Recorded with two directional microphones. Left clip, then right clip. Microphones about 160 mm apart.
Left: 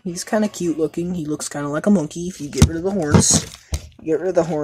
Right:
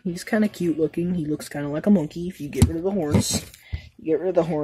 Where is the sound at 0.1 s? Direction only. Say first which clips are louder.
Left 4 dB; 35° right (ahead or behind).